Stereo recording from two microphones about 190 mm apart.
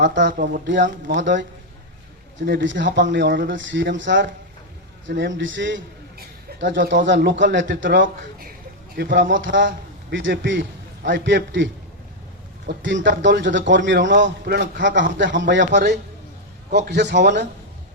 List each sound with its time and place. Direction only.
0.0 s a man's voice: 70° right (ahead or behind)
0.3 s speech: 45° right (ahead or behind)
1.1 s a man's voice: 70° right (ahead or behind)
9.0 s a man's voice: 60° right (ahead or behind)
15.7 s a man's voice: 60° right (ahead or behind)